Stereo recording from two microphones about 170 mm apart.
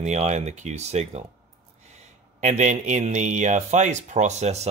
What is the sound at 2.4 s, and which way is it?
Speech, 45° right (ahead or behind).